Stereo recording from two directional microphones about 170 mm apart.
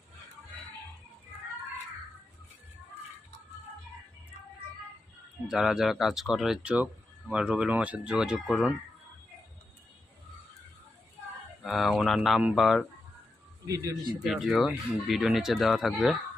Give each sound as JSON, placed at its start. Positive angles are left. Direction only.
{"t": 5.5, "sound": "speech", "side_deg": -5}
{"t": 11.6, "sound": "speech", "side_deg": 0}
{"t": 13.7, "sound": "a man's voice", "side_deg": -20}
{"t": 14.3, "sound": "speech", "side_deg": 0}